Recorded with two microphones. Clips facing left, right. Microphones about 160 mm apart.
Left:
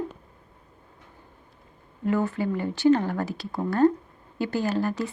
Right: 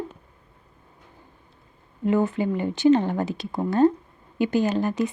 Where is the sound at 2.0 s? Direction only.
20° right (ahead or behind).